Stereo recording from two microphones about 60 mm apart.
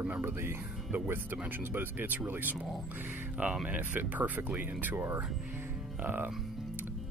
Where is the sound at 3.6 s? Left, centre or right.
Right.